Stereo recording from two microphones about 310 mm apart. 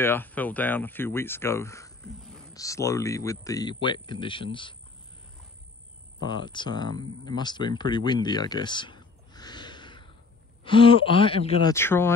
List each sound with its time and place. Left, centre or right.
0.0 s speech: centre
6.2 s speech: centre